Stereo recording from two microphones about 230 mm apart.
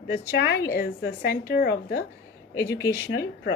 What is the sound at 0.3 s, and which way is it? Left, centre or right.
A woman's voice, left.